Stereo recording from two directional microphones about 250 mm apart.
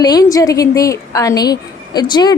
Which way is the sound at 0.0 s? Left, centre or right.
Centre.